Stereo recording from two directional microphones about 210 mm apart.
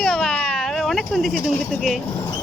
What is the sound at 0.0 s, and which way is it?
Cat, 5° left (ahead or behind).